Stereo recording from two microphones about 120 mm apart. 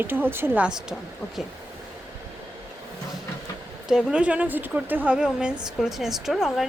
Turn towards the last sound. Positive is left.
turn(degrees=0)  # may be behind; listen again after turning